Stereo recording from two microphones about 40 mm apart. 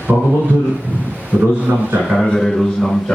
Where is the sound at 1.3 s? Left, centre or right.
Right.